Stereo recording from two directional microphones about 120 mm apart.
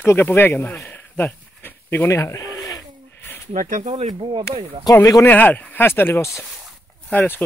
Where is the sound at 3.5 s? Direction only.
90° right.